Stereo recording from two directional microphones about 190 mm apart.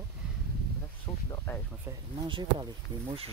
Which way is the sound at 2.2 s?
25° right (ahead or behind).